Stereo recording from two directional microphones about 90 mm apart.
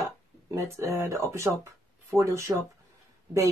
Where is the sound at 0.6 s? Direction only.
35° right (ahead or behind).